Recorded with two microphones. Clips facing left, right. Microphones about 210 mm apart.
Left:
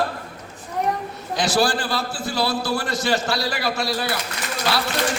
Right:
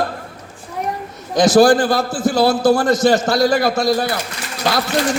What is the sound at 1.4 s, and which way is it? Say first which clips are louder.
A man's voice: right 10 dB; 45° right (ahead or behind).